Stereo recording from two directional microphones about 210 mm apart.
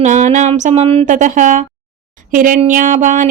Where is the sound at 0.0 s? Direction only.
35° right (ahead or behind).